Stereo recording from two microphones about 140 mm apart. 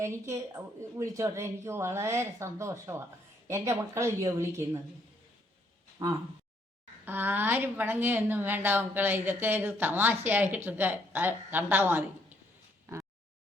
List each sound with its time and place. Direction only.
0.0 s a woman's voice: 20° right (ahead or behind)
7.0 s a woman's voice: 15° right (ahead or behind)